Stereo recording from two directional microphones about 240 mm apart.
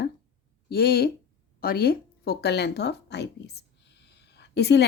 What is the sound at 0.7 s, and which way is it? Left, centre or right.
Speech, left.